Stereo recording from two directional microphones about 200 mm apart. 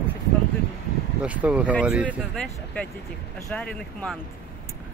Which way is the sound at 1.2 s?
5° right (ahead or behind).